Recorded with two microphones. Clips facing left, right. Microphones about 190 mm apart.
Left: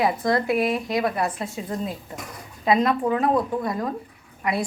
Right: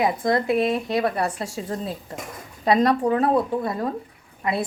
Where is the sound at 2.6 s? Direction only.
35° right (ahead or behind).